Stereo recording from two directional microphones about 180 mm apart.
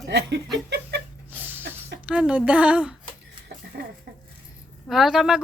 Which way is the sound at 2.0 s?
5° right (ahead or behind).